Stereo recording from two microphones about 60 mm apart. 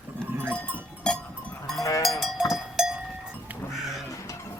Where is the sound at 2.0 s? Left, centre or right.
Centre.